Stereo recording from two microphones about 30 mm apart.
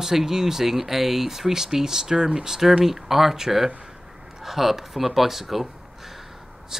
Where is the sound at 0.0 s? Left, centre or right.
Centre.